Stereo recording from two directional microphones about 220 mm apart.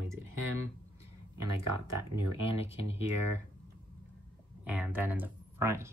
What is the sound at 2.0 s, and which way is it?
Speech, 90° right.